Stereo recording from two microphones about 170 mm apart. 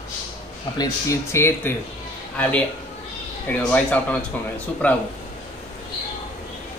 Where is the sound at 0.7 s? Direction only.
20° left (ahead or behind).